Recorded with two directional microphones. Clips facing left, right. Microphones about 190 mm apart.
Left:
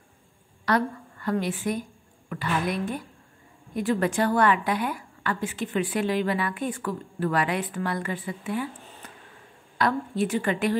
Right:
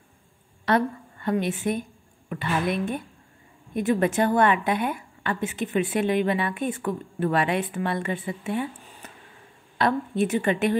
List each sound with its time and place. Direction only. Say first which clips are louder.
0.7 s a woman's voice: right 2 dB; 25° right (ahead or behind)
9.8 s a woman's voice: right 2 dB; 25° right (ahead or behind)